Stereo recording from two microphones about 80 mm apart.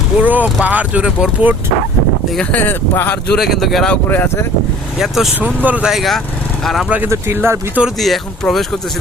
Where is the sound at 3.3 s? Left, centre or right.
Centre.